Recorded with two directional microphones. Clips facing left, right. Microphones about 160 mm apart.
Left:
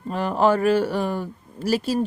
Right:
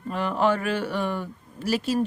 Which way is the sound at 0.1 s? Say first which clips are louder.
Left 4 dB; 40° left (ahead or behind).